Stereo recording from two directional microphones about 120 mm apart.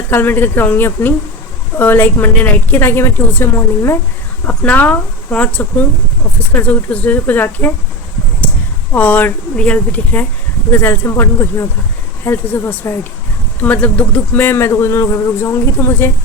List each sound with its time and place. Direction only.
0.1 s a woman's voice: 15° left (ahead or behind)
8.9 s a woman's voice: 10° left (ahead or behind)